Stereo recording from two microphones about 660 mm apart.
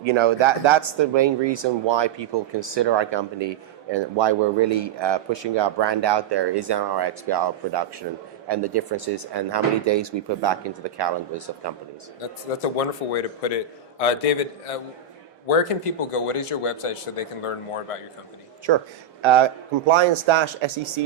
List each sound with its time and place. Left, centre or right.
0.0 s speech: right
12.2 s a man's voice: left
18.7 s speech: right